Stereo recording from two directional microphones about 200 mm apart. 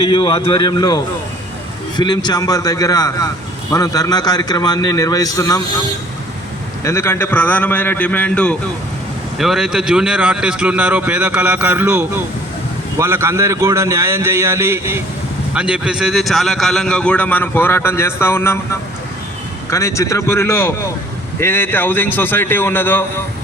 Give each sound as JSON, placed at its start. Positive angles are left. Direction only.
{"t": 0.0, "sound": "a man's voice", "side_deg": 25}
{"t": 6.8, "sound": "a man's voice", "side_deg": 15}
{"t": 19.7, "sound": "a man's voice", "side_deg": 15}